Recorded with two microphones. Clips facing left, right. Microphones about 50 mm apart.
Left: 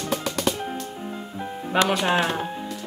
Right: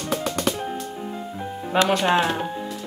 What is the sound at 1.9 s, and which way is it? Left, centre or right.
Speech, centre.